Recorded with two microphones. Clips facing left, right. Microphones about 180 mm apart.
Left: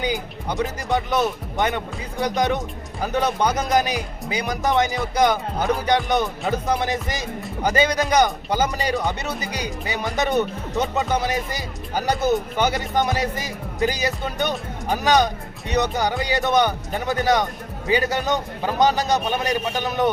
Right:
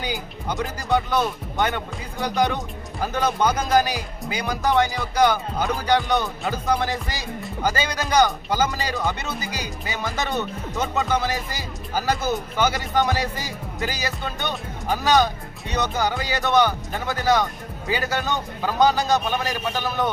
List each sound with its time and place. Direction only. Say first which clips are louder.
0.1 s a man's voice: left 2 dB; 20° left (ahead or behind)